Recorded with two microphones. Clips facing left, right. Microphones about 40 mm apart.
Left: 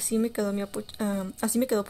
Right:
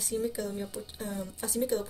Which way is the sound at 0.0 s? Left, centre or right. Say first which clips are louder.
Left 5 dB; left.